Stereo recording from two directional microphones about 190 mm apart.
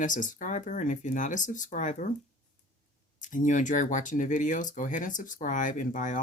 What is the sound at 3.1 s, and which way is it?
Speech, 40° left (ahead or behind).